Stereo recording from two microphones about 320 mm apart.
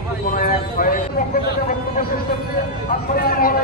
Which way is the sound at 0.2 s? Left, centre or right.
Left.